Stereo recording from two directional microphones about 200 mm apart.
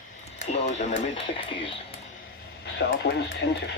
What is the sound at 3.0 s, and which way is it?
Speech, 55° left (ahead or behind).